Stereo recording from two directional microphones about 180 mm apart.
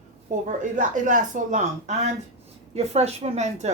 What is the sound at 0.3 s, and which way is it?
Speech, 45° right (ahead or behind).